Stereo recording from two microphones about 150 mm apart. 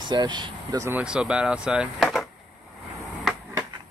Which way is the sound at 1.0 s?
5° right (ahead or behind).